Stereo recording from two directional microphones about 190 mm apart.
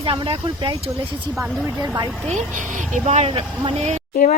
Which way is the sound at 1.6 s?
20° right (ahead or behind).